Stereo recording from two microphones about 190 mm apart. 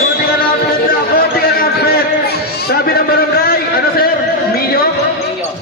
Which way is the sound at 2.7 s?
55° left (ahead or behind).